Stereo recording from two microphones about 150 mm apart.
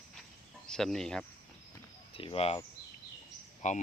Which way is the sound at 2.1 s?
40° left (ahead or behind).